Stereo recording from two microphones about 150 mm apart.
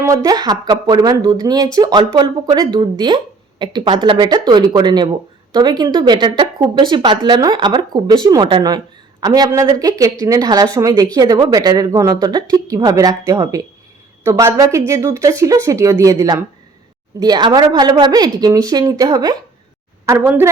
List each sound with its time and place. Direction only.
0.0 s a woman's voice: 20° right (ahead or behind)
20.1 s a woman's voice: 15° right (ahead or behind)